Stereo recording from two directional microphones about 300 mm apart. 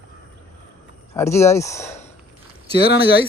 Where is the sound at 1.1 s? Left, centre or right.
Centre.